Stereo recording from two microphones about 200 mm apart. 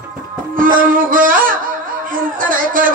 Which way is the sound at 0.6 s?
45° right (ahead or behind).